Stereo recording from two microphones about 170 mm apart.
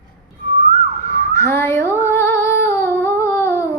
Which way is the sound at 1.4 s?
15° left (ahead or behind).